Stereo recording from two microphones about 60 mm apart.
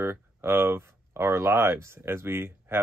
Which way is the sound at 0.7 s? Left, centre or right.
Right.